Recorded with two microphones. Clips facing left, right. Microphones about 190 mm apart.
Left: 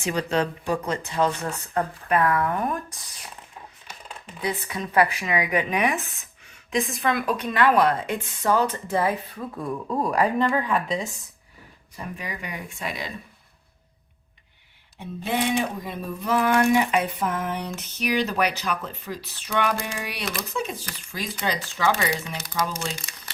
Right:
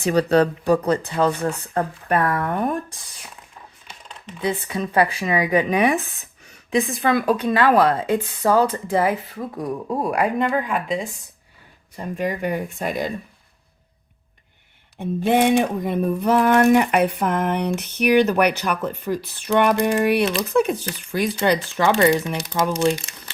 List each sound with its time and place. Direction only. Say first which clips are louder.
0.0 s speech: right 8 dB; 35° right (ahead or behind)
4.4 s speech: right 5 dB; 25° right (ahead or behind)
12.3 s speech: right 10 dB; 45° right (ahead or behind)
14.9 s a sound: right 8 dB; 50° right (ahead or behind); by 22.4 s 65° right (ahead or behind)